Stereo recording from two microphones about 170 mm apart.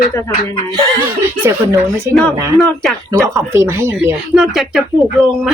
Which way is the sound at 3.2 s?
15° right (ahead or behind).